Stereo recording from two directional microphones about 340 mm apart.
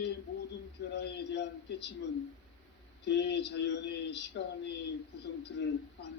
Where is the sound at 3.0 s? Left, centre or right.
Left.